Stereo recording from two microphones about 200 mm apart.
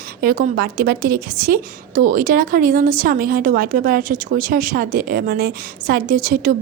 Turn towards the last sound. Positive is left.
turn(degrees=-45)  # may be behind; listen again after turning